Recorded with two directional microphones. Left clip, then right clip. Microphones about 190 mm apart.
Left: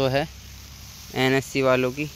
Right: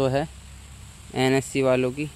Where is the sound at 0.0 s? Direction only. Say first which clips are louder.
Left 1 dB; 20° right (ahead or behind).